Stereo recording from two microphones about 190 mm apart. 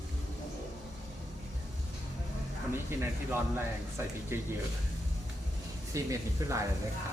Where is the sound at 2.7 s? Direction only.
10° right (ahead or behind).